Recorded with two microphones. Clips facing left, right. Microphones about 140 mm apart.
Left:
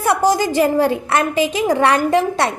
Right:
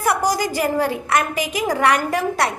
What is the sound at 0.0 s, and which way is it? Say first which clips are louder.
A woman's voice: left 4 dB; 25° left (ahead or behind).